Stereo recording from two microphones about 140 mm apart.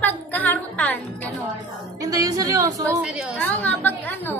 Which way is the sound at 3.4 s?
10° left (ahead or behind).